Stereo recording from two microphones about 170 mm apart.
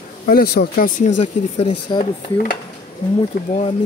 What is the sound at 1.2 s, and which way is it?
Speech, 45° left (ahead or behind).